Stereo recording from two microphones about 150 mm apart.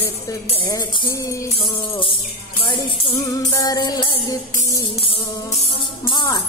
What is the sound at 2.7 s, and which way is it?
Music, 30° left (ahead or behind).